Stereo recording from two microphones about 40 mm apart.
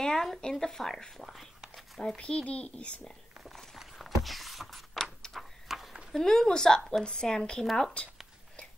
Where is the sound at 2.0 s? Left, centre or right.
Left.